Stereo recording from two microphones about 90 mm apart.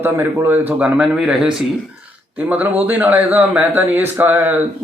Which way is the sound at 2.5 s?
20° right (ahead or behind).